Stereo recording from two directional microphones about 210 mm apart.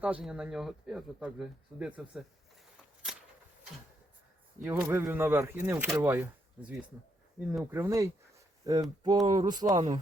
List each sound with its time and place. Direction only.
0.0 s speech: 5° right (ahead or behind)
2.7 s a sound: 5° right (ahead or behind)
4.6 s speech: 15° right (ahead or behind)